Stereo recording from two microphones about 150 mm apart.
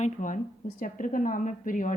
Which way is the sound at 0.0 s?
60° left (ahead or behind).